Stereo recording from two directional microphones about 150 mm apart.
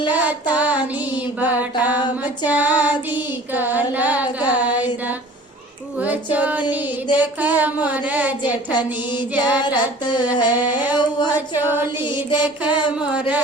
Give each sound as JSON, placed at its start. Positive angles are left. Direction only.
{"t": 0.1, "sound": "child singing", "side_deg": -10}
{"t": 1.4, "sound": "music", "side_deg": -10}
{"t": 6.0, "sound": "music", "side_deg": -10}
{"t": 8.4, "sound": "child singing", "side_deg": 30}
{"t": 9.3, "sound": "music", "side_deg": -10}
{"t": 9.6, "sound": "child singing", "side_deg": 30}
{"t": 10.6, "sound": "music", "side_deg": -10}